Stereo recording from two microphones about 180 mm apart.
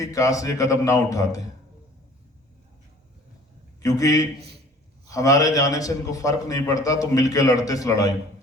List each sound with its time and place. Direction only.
0.0 s a man's voice: 20° left (ahead or behind)
3.8 s a man's voice: 20° left (ahead or behind)